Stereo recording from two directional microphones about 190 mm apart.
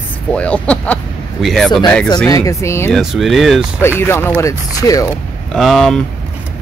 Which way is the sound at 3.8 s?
10° left (ahead or behind).